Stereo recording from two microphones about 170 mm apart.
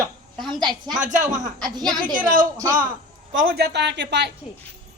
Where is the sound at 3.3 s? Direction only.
65° right (ahead or behind); by 4.3 s 90° right.